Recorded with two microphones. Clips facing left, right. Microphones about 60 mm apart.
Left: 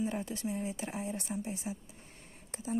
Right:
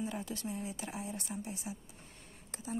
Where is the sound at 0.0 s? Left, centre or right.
Left.